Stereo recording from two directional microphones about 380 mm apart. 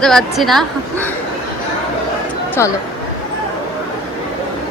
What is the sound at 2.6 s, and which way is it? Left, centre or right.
Speech, centre.